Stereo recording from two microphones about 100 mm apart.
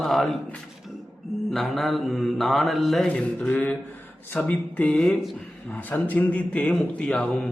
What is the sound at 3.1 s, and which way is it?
A man's voice, 15° left (ahead or behind).